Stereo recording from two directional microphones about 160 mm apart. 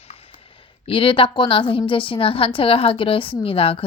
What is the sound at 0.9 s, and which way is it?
A woman's voice, 35° left (ahead or behind).